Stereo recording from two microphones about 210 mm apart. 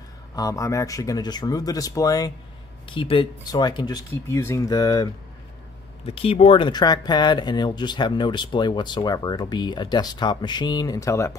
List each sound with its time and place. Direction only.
0.4 s speech: 15° left (ahead or behind)
6.0 s speech: 30° left (ahead or behind)